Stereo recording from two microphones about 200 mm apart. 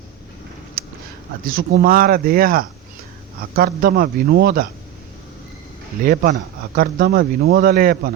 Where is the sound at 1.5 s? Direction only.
45° right (ahead or behind).